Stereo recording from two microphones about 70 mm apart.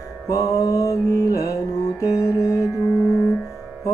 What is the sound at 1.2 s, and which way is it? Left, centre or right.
Music, left.